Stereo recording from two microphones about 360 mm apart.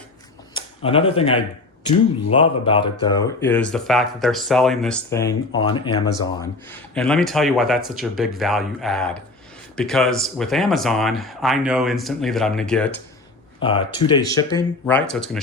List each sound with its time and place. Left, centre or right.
0.5 s speech: centre
6.7 s speech: centre
13.6 s speech: centre